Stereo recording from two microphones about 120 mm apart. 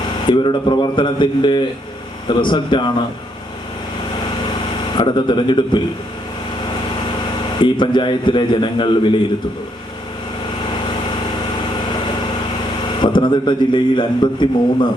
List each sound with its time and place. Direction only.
0.3 s a man's voice: 40° left (ahead or behind)
4.9 s a man's voice: 40° left (ahead or behind)
7.6 s a man's voice: 40° left (ahead or behind)
13.0 s a man's voice: 40° left (ahead or behind)